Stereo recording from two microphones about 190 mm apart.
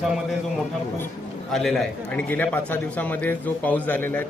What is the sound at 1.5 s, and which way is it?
A man's voice, centre (ahead or behind).